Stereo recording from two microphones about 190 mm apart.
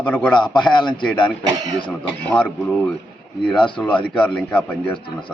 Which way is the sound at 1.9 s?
5° left (ahead or behind).